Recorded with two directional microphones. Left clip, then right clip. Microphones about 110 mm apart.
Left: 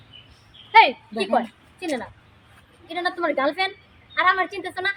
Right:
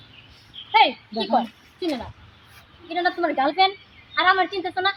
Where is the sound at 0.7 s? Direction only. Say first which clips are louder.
Left 3 dB; 30° left (ahead or behind).